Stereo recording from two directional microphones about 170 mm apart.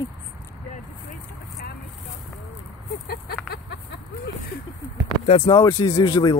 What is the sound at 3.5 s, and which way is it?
Chicken, 75° left (ahead or behind).